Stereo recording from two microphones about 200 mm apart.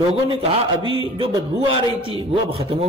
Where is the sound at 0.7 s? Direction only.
25° right (ahead or behind).